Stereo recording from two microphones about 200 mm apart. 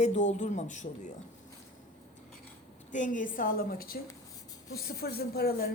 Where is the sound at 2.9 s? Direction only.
40° left (ahead or behind).